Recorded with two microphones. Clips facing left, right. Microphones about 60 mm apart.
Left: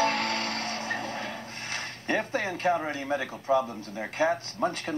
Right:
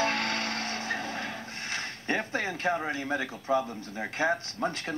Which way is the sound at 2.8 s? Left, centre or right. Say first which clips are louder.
Even; centre.